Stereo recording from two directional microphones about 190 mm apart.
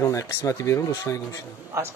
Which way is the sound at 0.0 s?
15° left (ahead or behind).